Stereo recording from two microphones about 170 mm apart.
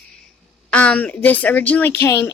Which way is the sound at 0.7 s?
10° left (ahead or behind).